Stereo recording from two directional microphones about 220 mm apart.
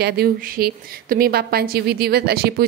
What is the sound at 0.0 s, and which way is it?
A woman's voice, 45° right (ahead or behind).